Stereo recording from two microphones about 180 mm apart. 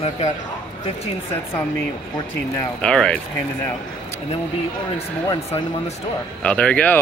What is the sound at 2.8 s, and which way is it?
Speech, 5° left (ahead or behind).